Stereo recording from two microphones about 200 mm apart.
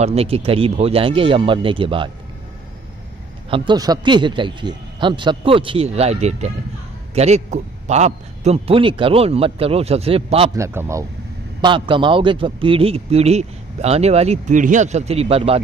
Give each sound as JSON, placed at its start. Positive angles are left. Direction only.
{"t": 0.0, "sound": "a man's voice", "side_deg": -30}
{"t": 3.4, "sound": "a man's voice", "side_deg": -25}
{"t": 10.5, "sound": "a man's voice", "side_deg": -15}
{"t": 11.6, "sound": "a man's voice", "side_deg": -25}